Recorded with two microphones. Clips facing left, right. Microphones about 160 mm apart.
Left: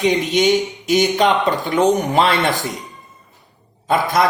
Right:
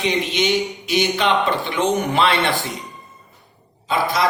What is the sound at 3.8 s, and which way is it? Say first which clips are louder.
Speech: left 3 dB; 50° left (ahead or behind).